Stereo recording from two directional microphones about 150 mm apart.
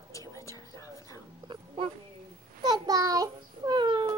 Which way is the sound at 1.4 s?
35° right (ahead or behind).